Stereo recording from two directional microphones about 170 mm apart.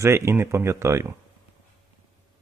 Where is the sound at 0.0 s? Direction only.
15° right (ahead or behind).